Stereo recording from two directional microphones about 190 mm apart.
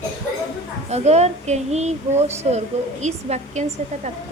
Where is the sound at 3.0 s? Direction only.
35° right (ahead or behind).